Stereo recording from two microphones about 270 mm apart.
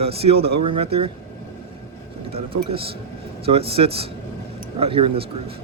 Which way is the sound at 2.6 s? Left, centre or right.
Centre.